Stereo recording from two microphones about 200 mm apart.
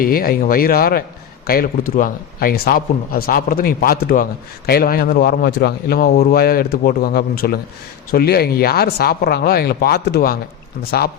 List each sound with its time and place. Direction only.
0.0 s a man's voice: 50° left (ahead or behind)